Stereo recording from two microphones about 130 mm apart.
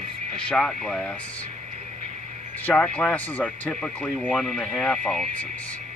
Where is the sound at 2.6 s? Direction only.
10° left (ahead or behind).